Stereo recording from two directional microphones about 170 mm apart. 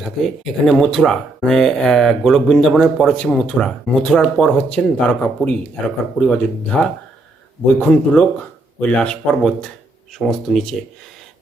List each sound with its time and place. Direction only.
0.0 s speech: centre (ahead or behind)